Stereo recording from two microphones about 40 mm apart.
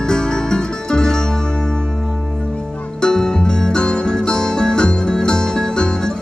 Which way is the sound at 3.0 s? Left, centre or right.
Centre.